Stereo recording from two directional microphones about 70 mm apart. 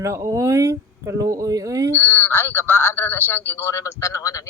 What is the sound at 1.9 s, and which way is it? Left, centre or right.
A man's voice, left.